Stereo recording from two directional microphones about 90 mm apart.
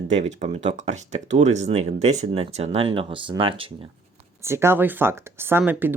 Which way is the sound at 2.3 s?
90° right.